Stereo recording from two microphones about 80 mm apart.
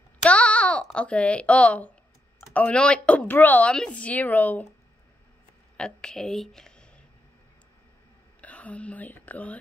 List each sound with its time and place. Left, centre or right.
0.2 s a sound: centre
2.5 s speech: centre
5.8 s speech: centre
8.4 s speech: centre